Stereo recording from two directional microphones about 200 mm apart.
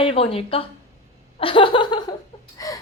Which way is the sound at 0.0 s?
30° left (ahead or behind).